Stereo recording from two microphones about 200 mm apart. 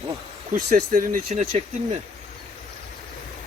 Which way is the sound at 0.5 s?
45° right (ahead or behind).